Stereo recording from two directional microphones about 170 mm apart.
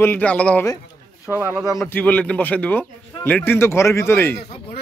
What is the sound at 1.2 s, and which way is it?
Speech, 10° right (ahead or behind).